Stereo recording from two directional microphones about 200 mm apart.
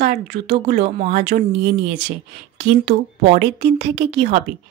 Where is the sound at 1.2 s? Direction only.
55° right (ahead or behind).